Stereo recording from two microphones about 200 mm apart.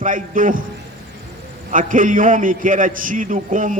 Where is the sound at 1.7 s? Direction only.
40° right (ahead or behind).